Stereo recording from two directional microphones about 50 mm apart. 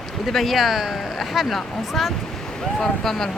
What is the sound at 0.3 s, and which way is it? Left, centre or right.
Speech, centre.